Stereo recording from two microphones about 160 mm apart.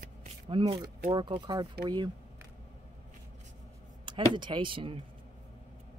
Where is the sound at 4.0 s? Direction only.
30° right (ahead or behind).